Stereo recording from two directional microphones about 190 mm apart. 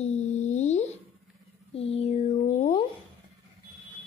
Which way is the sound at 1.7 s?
30° left (ahead or behind).